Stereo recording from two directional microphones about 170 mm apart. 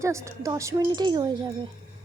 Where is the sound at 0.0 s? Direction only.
20° right (ahead or behind).